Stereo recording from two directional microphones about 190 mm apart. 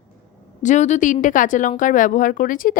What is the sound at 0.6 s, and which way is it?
A woman's voice, 40° left (ahead or behind).